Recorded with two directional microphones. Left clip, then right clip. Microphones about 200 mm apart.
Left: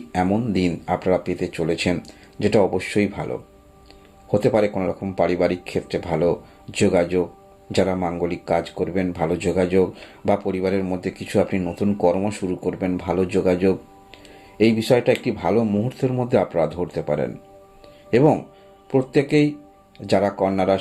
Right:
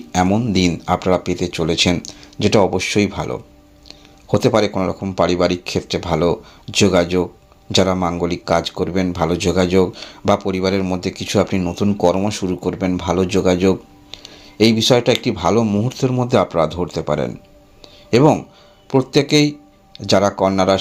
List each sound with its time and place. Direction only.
0.1 s speech: 35° right (ahead or behind)